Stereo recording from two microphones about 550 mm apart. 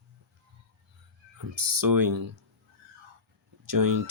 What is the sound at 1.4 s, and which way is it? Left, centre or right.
Speech, right.